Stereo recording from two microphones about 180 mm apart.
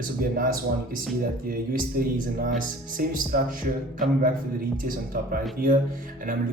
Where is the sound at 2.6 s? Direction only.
50° right (ahead or behind).